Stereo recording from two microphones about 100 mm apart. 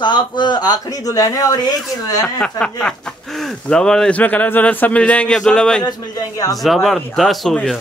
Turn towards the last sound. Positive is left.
turn(degrees=0)  # may be behind; listen again after turning